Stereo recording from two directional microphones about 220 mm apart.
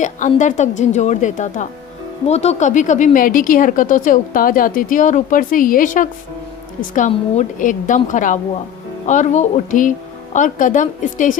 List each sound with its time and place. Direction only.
0.0 s speech: 35° left (ahead or behind)